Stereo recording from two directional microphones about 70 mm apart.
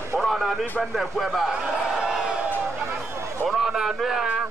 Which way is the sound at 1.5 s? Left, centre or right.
Centre.